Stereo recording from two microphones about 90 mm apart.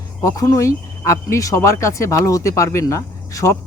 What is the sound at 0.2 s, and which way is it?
Speech, 40° left (ahead or behind).